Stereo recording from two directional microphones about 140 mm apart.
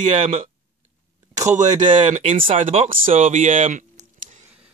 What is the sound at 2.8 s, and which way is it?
Speech, 65° right (ahead or behind).